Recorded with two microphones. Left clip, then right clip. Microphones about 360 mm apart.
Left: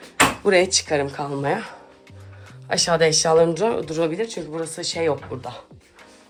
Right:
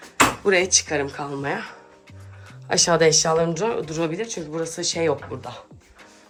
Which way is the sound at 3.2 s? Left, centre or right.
Centre.